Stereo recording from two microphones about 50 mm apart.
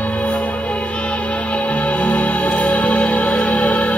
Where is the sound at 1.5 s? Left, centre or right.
Left.